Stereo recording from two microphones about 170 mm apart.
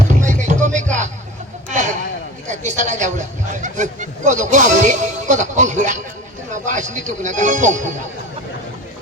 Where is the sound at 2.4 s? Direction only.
45° right (ahead or behind).